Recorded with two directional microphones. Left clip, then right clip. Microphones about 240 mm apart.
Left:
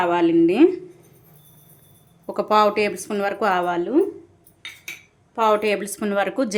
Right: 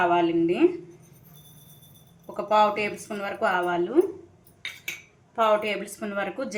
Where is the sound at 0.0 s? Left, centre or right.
Left.